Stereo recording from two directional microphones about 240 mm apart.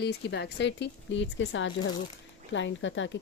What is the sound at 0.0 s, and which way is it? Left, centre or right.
Speech, left.